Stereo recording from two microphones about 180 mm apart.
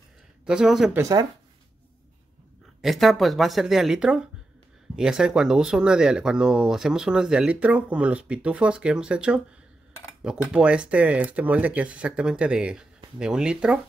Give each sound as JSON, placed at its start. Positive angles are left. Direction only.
{"t": 0.5, "sound": "speech", "side_deg": -5}
{"t": 0.9, "sound": "speech", "side_deg": -20}
{"t": 2.8, "sound": "speech", "side_deg": 0}